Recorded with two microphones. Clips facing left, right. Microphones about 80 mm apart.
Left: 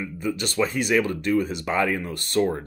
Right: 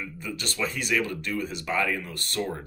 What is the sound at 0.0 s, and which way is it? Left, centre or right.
Speech, left.